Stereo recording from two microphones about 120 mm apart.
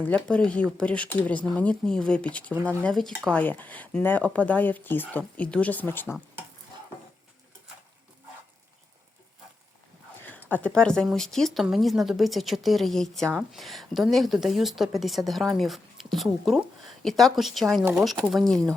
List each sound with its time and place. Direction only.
0.0 s a woman's voice: 10° left (ahead or behind)
3.3 s speech: 15° left (ahead or behind)
10.2 s a woman's voice: 15° left (ahead or behind)